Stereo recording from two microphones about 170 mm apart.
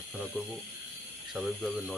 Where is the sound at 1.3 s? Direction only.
Centre (ahead or behind).